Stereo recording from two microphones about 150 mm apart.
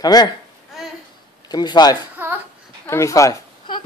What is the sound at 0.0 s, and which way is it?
Speech, 25° left (ahead or behind).